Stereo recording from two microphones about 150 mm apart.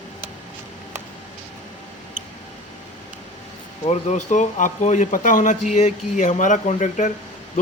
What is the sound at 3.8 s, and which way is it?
A man's voice, 45° left (ahead or behind).